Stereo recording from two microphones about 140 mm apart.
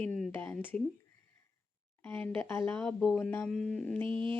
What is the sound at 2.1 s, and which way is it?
Speech, 15° left (ahead or behind).